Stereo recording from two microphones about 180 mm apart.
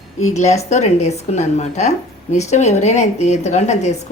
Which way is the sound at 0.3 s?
40° left (ahead or behind).